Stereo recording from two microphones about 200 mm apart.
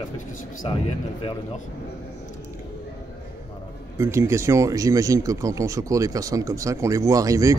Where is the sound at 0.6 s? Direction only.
25° left (ahead or behind).